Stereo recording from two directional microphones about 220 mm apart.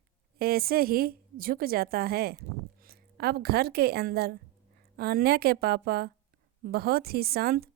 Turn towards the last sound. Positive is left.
turn(degrees=-45)  # may be behind; listen again after turning